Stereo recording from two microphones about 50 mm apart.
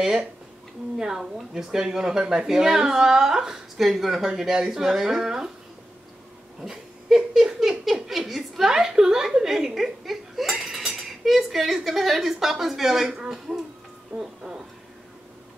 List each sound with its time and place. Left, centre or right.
0.0 s a woman's voice: centre
6.6 s a woman's voice: centre